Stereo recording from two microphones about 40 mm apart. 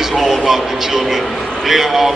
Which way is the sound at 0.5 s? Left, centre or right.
Centre.